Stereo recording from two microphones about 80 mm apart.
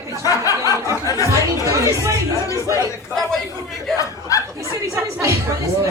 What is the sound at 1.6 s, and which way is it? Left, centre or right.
Speech, right.